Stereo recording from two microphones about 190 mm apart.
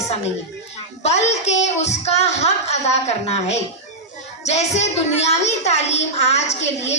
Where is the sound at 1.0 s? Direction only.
35° left (ahead or behind).